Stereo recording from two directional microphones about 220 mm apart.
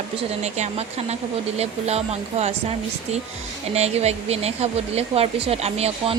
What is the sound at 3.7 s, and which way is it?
Speech, 30° right (ahead or behind).